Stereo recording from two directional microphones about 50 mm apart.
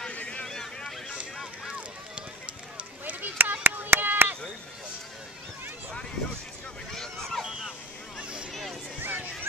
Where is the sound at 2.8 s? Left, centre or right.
Right.